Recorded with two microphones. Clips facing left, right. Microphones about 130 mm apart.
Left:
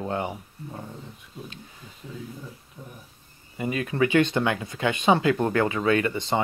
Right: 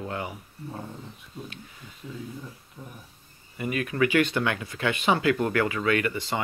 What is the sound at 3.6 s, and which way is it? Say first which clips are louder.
Speech: left 1 dB; 25° left (ahead or behind).